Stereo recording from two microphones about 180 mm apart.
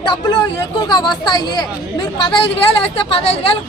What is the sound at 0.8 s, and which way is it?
Speech, 25° left (ahead or behind).